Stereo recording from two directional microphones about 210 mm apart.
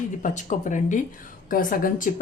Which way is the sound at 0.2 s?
35° left (ahead or behind).